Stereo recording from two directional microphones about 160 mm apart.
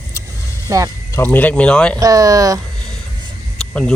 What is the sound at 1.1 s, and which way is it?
Speech, 15° left (ahead or behind).